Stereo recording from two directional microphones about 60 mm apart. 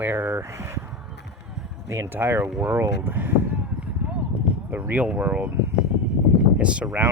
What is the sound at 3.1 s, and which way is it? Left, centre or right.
Speech, right.